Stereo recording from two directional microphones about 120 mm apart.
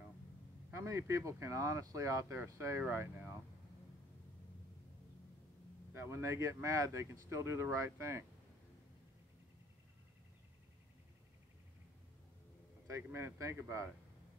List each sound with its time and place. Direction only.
0.7 s speech: 25° right (ahead or behind)
5.9 s speech: 20° right (ahead or behind)
12.8 s speech: 25° right (ahead or behind)